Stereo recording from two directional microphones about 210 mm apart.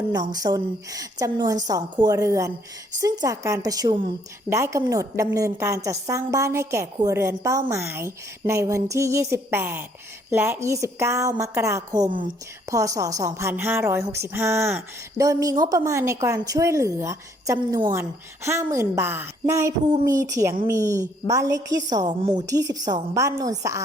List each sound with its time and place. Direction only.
0.1 s a woman's voice: 20° right (ahead or behind)